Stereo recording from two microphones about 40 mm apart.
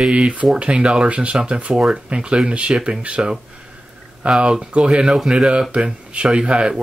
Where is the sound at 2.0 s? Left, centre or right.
Right.